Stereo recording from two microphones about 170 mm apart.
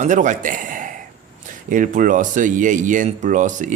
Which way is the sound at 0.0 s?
45° right (ahead or behind).